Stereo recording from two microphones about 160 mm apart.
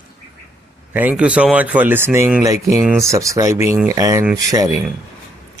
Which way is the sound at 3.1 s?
20° right (ahead or behind).